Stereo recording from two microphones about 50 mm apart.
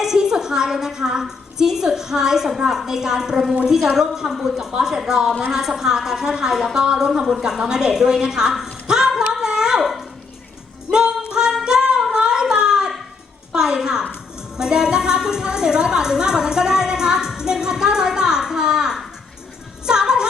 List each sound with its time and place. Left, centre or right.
0.0 s a woman's voice: centre
10.9 s music: centre
11.3 s music: centre
12.1 s a sound: centre
13.5 s a woman's voice: centre